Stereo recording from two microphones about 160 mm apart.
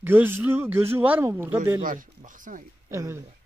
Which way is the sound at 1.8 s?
60° right (ahead or behind).